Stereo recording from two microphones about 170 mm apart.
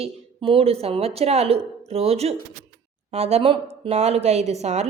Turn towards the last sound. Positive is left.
turn(degrees=-40)  # may be behind; listen again after turning